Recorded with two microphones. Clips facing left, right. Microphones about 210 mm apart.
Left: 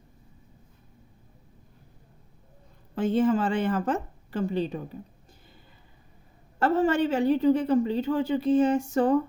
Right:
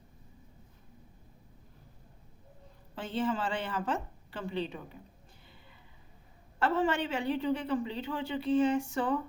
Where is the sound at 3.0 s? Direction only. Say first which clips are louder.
Left 9 dB; 45° left (ahead or behind).